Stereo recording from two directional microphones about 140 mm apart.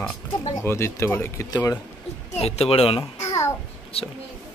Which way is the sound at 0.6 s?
20° left (ahead or behind).